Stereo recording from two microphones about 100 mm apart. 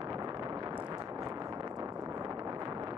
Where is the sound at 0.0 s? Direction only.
40° right (ahead or behind).